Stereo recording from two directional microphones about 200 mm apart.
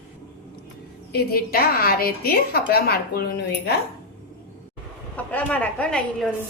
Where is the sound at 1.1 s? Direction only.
50° left (ahead or behind).